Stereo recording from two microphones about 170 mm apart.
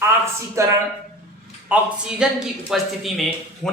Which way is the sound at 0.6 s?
15° right (ahead or behind).